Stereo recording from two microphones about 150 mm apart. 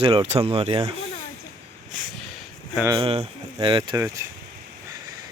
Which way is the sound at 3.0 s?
40° right (ahead or behind).